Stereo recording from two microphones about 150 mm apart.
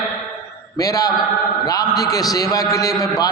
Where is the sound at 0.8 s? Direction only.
25° left (ahead or behind).